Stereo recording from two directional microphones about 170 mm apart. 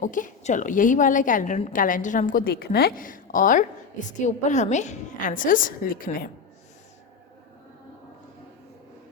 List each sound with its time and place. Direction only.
0.0 s a woman's voice: 50° left (ahead or behind)